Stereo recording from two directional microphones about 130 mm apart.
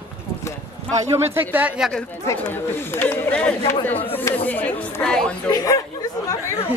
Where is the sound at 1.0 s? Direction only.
20° right (ahead or behind).